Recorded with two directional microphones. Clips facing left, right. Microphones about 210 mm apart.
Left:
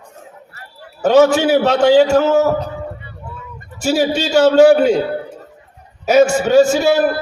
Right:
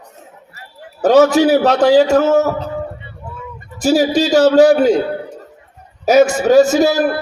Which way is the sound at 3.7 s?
35° right (ahead or behind).